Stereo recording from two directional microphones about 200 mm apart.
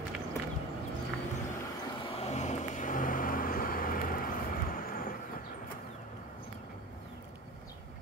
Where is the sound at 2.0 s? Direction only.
35° left (ahead or behind).